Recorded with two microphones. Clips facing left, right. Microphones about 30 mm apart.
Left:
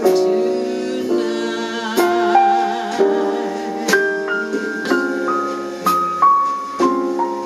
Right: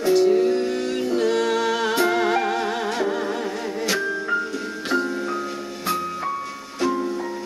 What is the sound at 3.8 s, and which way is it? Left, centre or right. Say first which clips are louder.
Music: left 8 dB; left.